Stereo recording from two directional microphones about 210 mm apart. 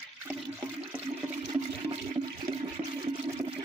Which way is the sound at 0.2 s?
10° right (ahead or behind).